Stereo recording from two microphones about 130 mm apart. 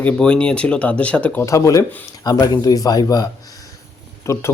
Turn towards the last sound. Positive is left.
turn(degrees=20)  # may be behind; listen again after turning